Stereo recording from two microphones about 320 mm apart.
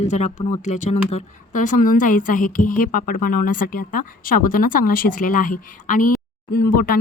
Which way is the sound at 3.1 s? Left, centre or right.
Left.